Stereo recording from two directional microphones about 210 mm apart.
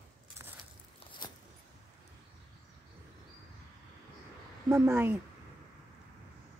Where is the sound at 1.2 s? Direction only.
20° left (ahead or behind).